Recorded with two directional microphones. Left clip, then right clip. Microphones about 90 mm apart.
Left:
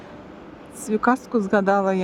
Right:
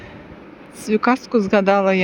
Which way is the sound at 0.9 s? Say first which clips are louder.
Right 3 dB; 10° left (ahead or behind).